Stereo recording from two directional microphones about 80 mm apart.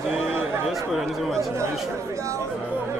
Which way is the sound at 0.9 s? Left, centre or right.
Centre.